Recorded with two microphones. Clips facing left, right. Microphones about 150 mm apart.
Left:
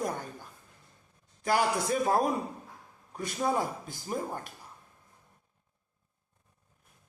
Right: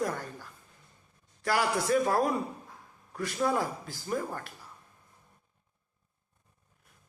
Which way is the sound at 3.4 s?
20° left (ahead or behind).